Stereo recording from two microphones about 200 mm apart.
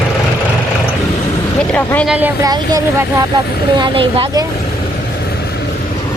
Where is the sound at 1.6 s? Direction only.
5° left (ahead or behind).